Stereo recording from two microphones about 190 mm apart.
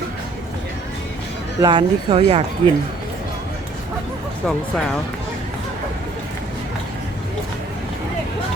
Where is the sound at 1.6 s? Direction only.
25° right (ahead or behind).